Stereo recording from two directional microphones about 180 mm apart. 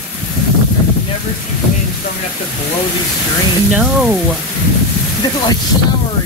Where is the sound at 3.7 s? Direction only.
5° right (ahead or behind).